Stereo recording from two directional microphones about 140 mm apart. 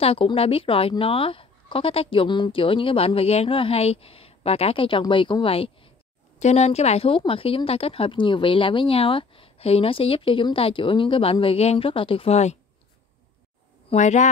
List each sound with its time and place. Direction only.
0.0 s speech: 40° left (ahead or behind)
6.4 s speech: 50° left (ahead or behind)
13.8 s speech: 55° left (ahead or behind)